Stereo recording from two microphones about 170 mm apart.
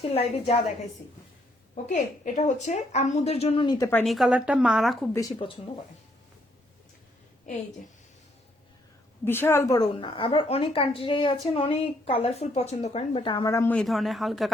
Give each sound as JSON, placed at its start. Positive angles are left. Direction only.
{"t": 0.0, "sound": "a woman's voice", "side_deg": 35}
{"t": 1.7, "sound": "a woman's voice", "side_deg": 45}
{"t": 4.0, "sound": "a woman's voice", "side_deg": 0}
{"t": 5.4, "sound": "a woman's voice", "side_deg": 35}
{"t": 9.2, "sound": "a woman's voice", "side_deg": 15}
{"t": 13.5, "sound": "speech", "side_deg": 15}
{"t": 13.7, "sound": "a woman's voice", "side_deg": 0}